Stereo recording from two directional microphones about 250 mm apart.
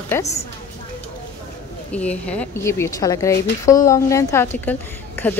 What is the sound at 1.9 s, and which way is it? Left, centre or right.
A woman's voice, centre.